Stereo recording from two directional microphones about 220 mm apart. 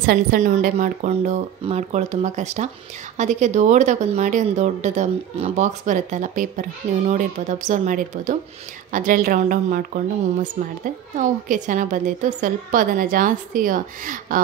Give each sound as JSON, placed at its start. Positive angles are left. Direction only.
{"t": 0.0, "sound": "a woman's voice", "side_deg": -40}